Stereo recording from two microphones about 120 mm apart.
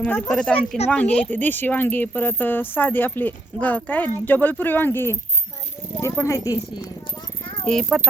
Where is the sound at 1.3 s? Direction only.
15° left (ahead or behind).